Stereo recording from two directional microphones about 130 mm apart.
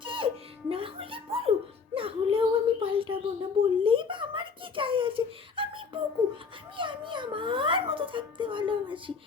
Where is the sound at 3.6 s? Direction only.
40° right (ahead or behind).